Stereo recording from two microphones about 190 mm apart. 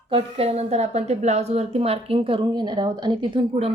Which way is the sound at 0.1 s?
30° right (ahead or behind).